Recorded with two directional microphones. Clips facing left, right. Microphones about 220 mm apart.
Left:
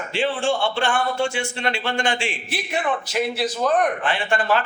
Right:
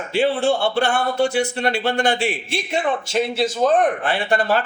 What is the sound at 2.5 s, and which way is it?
A man's voice, 25° right (ahead or behind).